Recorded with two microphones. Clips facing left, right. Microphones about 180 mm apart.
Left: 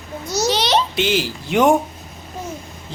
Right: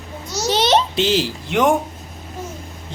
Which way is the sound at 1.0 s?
35° right (ahead or behind).